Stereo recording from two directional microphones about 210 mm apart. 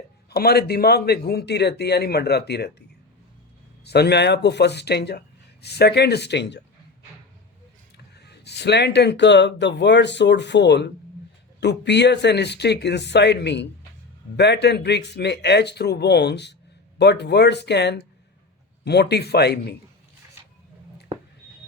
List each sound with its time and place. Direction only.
0.3 s a man's voice: 50° left (ahead or behind)
3.8 s a man's voice: 50° left (ahead or behind)
7.9 s a man's voice: 50° left (ahead or behind)